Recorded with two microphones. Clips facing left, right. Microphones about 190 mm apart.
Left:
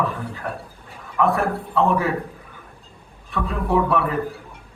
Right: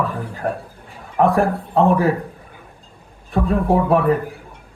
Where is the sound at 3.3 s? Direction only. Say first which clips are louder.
Right 5 dB; 35° right (ahead or behind).